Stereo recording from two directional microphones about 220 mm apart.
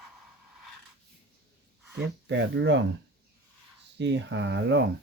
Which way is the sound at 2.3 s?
55° right (ahead or behind).